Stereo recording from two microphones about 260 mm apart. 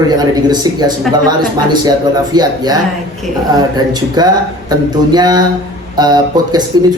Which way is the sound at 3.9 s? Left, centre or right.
Centre.